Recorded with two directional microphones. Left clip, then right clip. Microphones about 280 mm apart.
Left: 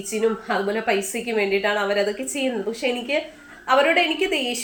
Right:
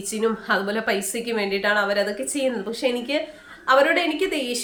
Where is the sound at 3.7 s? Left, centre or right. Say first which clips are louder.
Even; right.